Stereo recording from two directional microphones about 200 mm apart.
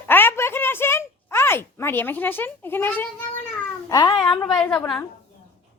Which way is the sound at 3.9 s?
20° left (ahead or behind).